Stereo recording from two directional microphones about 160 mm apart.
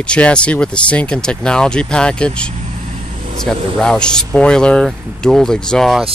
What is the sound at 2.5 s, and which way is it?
Vehicle, 45° right (ahead or behind).